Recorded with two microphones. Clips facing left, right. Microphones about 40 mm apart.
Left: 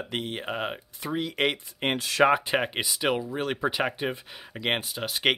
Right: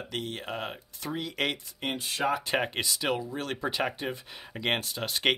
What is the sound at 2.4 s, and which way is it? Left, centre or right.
Speech, centre.